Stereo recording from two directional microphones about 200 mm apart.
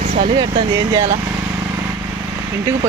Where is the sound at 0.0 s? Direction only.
35° right (ahead or behind).